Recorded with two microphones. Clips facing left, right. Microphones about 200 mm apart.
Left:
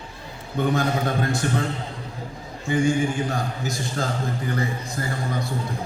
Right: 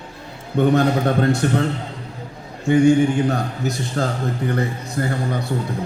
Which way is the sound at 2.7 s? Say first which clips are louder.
Right 7 dB; 65° right (ahead or behind).